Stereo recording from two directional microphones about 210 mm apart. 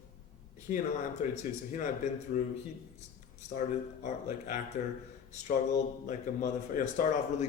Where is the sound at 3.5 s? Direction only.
35° left (ahead or behind).